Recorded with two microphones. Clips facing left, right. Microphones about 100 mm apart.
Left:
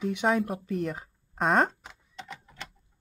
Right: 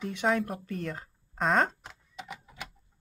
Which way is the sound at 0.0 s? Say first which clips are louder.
Left 3 dB; 15° left (ahead or behind).